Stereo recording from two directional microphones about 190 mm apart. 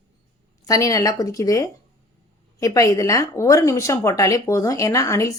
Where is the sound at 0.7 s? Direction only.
15° left (ahead or behind).